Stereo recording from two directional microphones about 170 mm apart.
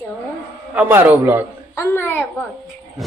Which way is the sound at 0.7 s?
10° right (ahead or behind).